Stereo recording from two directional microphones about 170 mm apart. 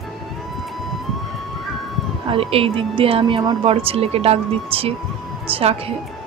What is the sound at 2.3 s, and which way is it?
Speech, 35° right (ahead or behind).